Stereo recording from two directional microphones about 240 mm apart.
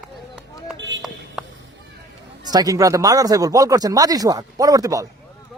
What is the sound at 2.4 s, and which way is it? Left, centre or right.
Speech, centre.